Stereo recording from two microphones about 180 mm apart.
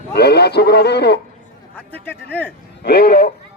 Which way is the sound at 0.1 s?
65° left (ahead or behind).